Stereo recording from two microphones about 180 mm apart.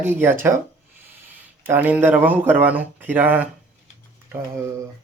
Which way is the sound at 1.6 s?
10° right (ahead or behind).